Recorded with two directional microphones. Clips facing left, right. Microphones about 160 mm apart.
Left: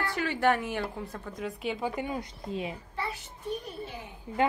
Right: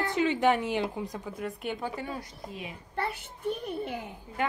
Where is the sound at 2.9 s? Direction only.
60° right (ahead or behind).